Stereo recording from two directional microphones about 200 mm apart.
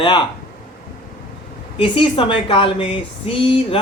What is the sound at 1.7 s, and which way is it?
Speech, 25° left (ahead or behind).